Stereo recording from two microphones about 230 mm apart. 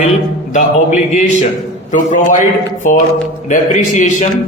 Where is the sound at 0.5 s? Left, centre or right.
Left.